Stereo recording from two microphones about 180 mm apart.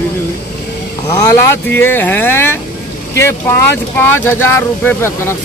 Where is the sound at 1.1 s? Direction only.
15° left (ahead or behind).